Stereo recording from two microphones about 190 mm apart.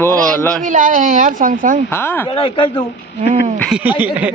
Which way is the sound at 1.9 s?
10° left (ahead or behind).